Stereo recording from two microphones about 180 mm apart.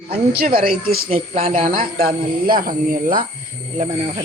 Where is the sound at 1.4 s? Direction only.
35° right (ahead or behind).